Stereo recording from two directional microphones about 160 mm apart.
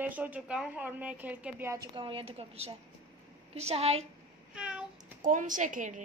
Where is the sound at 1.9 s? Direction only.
30° right (ahead or behind).